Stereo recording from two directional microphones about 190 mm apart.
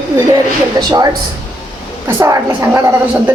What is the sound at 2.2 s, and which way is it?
A woman's voice, 15° right (ahead or behind).